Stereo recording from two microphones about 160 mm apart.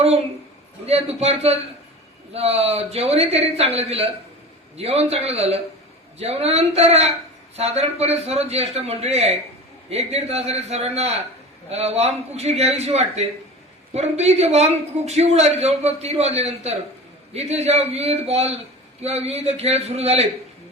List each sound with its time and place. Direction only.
0.9 s a man's voice: 40° right (ahead or behind)